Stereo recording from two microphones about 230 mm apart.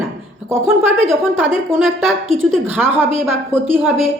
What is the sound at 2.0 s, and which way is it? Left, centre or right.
Speech, centre.